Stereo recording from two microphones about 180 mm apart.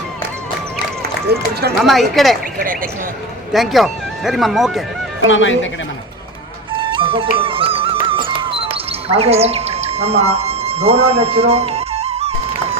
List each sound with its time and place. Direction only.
1.3 s speech: 65° right (ahead or behind)
1.8 s speech: centre (ahead or behind)
3.5 s speech: centre (ahead or behind)
5.3 s speech: 90° left
6.8 s music: 30° right (ahead or behind)